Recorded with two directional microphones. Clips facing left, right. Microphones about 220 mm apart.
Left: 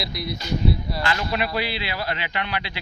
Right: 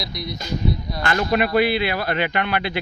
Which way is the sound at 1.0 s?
50° right (ahead or behind).